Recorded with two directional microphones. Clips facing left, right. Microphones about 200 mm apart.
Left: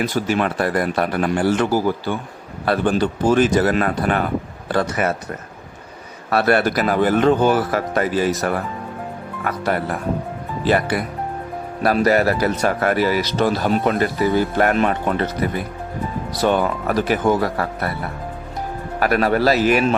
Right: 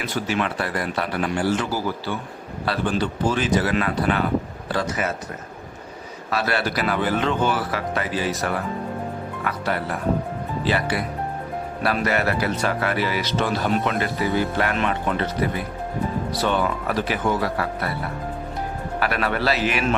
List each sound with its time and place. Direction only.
0.0 s speech: 40° left (ahead or behind)
6.3 s speech: 55° left (ahead or behind)
16.4 s speech: 45° left (ahead or behind)
18.9 s speech: 45° left (ahead or behind)